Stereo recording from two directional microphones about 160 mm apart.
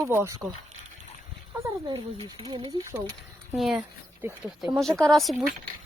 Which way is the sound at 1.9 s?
30° right (ahead or behind).